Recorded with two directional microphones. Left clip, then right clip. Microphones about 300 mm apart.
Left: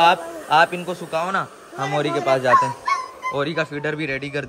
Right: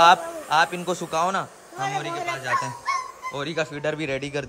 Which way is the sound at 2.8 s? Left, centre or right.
Centre.